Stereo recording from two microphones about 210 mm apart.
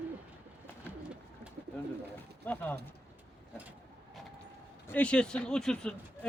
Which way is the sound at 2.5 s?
10° left (ahead or behind).